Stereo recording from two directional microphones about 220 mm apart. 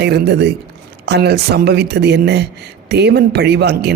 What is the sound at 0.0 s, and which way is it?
Speech, 50° right (ahead or behind).